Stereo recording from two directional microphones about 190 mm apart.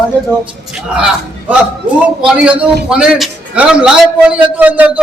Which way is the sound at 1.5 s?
5° right (ahead or behind).